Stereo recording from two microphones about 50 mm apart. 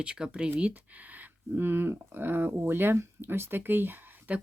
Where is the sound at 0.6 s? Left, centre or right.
Right.